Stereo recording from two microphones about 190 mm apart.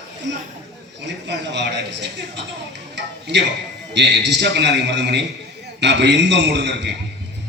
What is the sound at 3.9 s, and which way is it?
A man's voice, 65° right (ahead or behind).